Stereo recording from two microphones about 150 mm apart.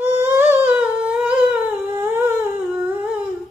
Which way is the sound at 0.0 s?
15° right (ahead or behind).